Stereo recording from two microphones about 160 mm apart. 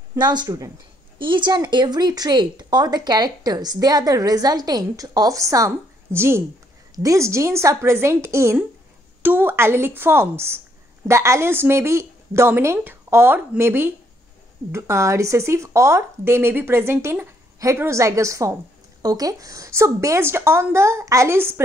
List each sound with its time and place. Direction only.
0.2 s speech: 25° right (ahead or behind)